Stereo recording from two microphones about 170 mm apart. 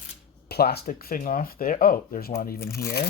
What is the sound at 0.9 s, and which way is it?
Speech, 55° left (ahead or behind).